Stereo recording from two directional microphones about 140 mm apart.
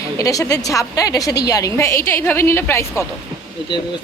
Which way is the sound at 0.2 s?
25° left (ahead or behind).